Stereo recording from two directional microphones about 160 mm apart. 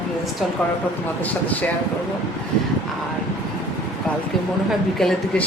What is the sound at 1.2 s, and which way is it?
Speech, 10° left (ahead or behind).